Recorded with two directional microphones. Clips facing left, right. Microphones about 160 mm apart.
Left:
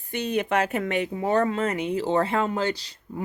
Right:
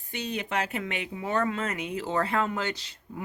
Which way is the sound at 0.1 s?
55° left (ahead or behind).